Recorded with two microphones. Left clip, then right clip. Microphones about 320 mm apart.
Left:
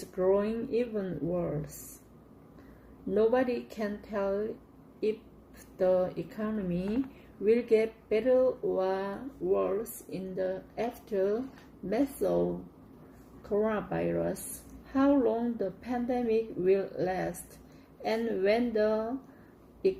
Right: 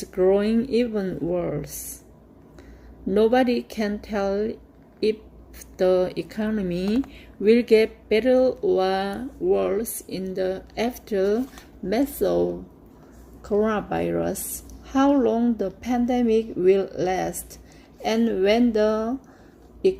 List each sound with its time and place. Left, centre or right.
0.0 s speech: right
3.2 s speech: right
5.7 s speech: right
13.6 s speech: right